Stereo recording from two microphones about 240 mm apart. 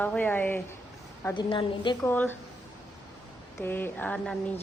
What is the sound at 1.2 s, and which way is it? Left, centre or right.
Speech, centre.